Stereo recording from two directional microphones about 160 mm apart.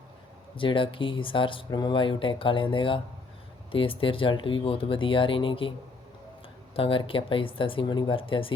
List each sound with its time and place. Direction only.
0.5 s speech: 30° left (ahead or behind)
6.7 s speech: 35° left (ahead or behind)